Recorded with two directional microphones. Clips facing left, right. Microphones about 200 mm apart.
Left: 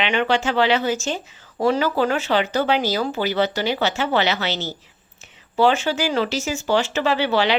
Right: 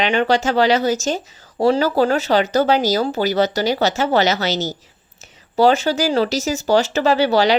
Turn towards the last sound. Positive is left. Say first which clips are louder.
# right 4 dB
turn(degrees=-40)  # may be behind; listen again after turning